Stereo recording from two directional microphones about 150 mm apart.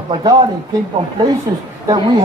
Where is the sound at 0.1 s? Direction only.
30° right (ahead or behind).